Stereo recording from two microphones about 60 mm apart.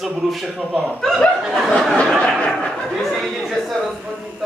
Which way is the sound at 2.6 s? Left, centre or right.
Centre.